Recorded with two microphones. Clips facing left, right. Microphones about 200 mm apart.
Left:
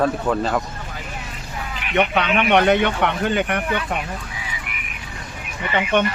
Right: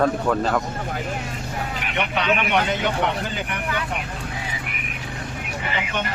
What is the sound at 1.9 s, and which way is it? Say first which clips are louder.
A man's voice: left 4 dB; 60° left (ahead or behind).